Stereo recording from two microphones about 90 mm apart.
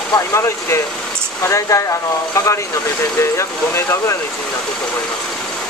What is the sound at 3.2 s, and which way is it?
Speech, 30° left (ahead or behind).